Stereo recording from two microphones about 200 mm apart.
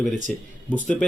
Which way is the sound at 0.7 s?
5° left (ahead or behind).